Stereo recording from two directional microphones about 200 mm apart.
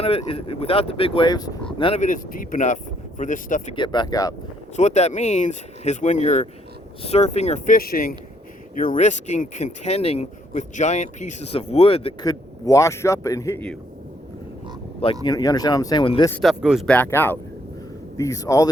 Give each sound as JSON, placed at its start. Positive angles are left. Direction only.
{"t": 0.0, "sound": "speech", "side_deg": 30}
{"t": 1.8, "sound": "speech", "side_deg": 30}
{"t": 3.8, "sound": "speech", "side_deg": 20}
{"t": 4.8, "sound": "speech", "side_deg": 35}
{"t": 15.2, "sound": "speech", "side_deg": 20}
{"t": 16.3, "sound": "speech", "side_deg": 0}